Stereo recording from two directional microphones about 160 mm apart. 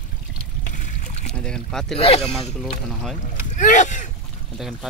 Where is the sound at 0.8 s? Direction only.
50° left (ahead or behind).